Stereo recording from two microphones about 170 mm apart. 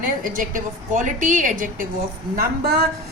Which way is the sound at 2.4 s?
65° right (ahead or behind).